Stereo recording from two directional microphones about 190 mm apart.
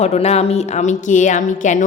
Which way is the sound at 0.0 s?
35° left (ahead or behind).